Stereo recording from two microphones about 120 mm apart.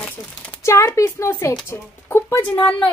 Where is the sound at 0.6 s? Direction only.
25° left (ahead or behind).